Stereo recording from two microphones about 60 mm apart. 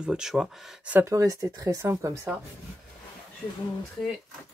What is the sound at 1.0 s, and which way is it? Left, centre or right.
Speech, right.